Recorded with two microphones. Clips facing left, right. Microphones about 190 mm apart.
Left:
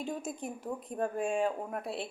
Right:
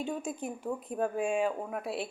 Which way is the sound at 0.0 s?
Centre (ahead or behind).